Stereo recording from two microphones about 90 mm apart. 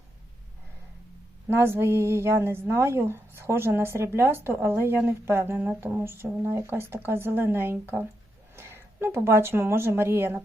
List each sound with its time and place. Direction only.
1.5 s a woman's voice: 25° right (ahead or behind)